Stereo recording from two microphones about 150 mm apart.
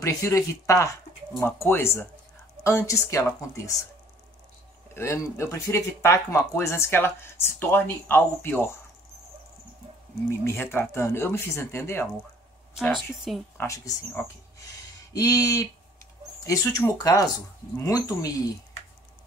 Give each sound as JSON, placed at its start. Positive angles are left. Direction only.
{"t": 0.0, "sound": "a woman's voice", "side_deg": 20}
{"t": 4.9, "sound": "speech", "side_deg": 20}
{"t": 10.4, "sound": "speech", "side_deg": 15}
{"t": 12.9, "sound": "a woman's voice", "side_deg": 0}
{"t": 13.6, "sound": "a woman's voice", "side_deg": 20}